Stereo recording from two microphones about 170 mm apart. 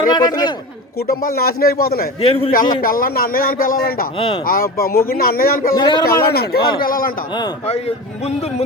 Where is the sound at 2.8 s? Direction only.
55° left (ahead or behind).